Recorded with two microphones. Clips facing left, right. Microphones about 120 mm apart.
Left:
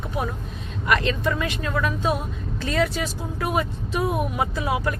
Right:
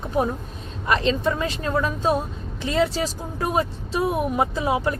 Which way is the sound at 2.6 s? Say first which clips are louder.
Right 2 dB; 25° right (ahead or behind).